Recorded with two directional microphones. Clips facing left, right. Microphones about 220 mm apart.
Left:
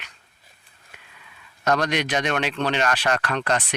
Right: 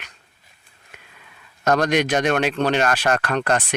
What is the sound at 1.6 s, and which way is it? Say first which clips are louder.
Speech: right 4 dB; 45° right (ahead or behind).